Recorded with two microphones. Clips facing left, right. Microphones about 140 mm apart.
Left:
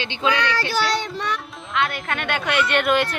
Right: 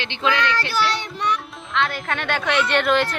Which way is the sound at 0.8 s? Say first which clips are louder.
Even; 45° left (ahead or behind).